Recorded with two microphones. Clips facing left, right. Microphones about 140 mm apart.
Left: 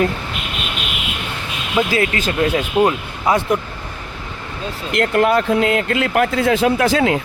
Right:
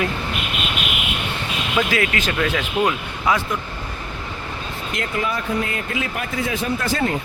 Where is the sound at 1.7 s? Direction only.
30° left (ahead or behind).